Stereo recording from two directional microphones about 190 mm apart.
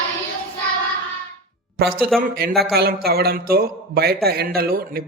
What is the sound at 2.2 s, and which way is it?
A man's voice, 55° right (ahead or behind).